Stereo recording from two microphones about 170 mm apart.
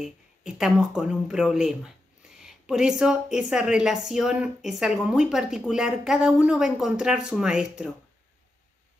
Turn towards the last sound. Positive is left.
turn(degrees=-5)  # may be behind; listen again after turning